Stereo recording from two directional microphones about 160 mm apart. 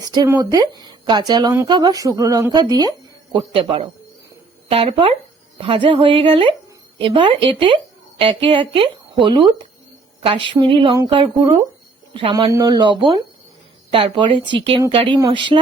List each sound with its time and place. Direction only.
0.3 s speech: 25° right (ahead or behind)